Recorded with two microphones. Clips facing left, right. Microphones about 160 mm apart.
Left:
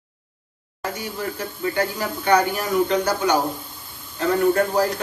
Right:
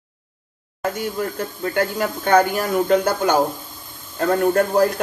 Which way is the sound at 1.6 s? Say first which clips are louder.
Right 3 dB; 50° right (ahead or behind).